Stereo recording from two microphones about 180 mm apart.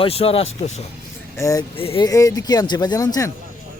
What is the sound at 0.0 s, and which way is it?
Speech, 30° left (ahead or behind).